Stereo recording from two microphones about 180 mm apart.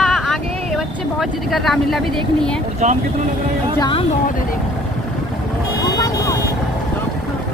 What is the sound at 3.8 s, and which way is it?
Speech, 30° left (ahead or behind).